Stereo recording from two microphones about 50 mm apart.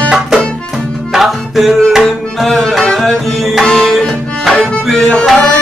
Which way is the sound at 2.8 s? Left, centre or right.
Centre.